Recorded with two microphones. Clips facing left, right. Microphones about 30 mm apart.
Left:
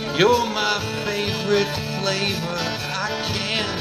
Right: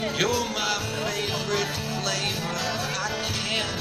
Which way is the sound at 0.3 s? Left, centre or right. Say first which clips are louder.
Left 6 dB; left.